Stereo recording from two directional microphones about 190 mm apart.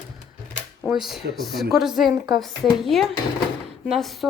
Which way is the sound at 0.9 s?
Centre (ahead or behind).